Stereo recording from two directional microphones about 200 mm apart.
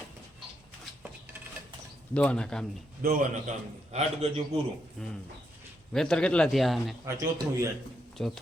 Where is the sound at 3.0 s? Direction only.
45° right (ahead or behind).